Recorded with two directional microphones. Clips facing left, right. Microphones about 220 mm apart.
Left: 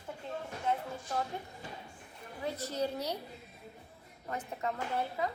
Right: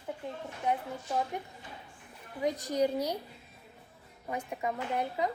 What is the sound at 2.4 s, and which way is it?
Speech, 15° right (ahead or behind).